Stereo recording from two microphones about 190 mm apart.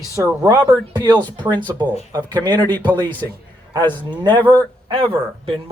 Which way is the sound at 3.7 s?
25° right (ahead or behind).